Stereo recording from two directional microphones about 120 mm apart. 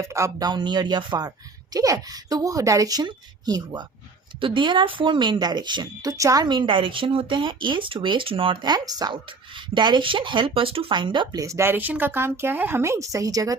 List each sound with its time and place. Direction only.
0.0 s a woman's voice: 25° right (ahead or behind)
4.4 s a woman's voice: 45° right (ahead or behind)